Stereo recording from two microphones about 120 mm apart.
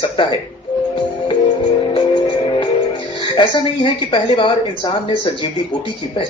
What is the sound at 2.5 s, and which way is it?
Speech, 45° left (ahead or behind).